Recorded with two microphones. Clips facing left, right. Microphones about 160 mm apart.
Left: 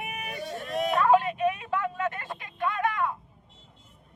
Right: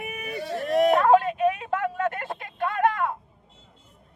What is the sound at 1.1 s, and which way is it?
Vehicle, 50° right (ahead or behind).